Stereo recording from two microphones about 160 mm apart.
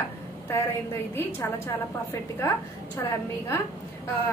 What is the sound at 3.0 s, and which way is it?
Speech, 15° left (ahead or behind).